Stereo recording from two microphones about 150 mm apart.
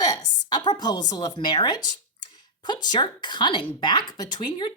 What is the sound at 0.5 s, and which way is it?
Speech, 30° left (ahead or behind).